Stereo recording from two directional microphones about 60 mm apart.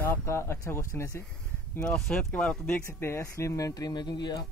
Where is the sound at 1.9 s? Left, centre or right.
Centre.